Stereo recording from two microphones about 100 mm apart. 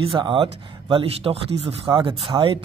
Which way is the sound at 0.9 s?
75° right (ahead or behind).